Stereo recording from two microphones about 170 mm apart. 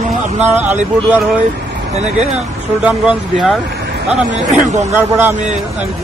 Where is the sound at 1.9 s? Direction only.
40° right (ahead or behind).